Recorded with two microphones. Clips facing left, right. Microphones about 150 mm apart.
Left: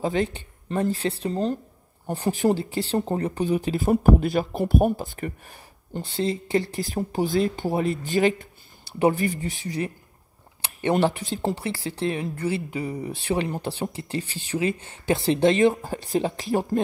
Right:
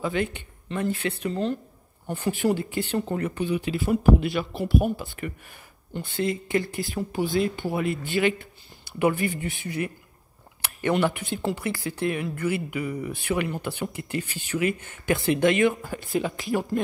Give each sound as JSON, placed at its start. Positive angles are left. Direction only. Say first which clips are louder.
{"t": 0.0, "sound": "speech", "louder": "left 2 dB", "side_deg": 35}